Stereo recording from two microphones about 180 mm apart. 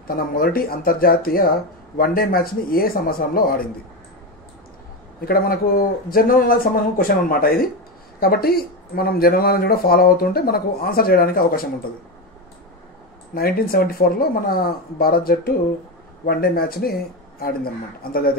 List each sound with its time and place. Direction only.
0.1 s speech: 55° left (ahead or behind)
5.2 s speech: 55° left (ahead or behind)
13.3 s speech: 55° left (ahead or behind)
18.0 s speech: 55° left (ahead or behind)